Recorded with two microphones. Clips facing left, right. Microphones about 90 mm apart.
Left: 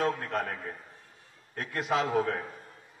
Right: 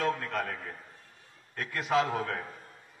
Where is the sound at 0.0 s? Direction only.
35° left (ahead or behind).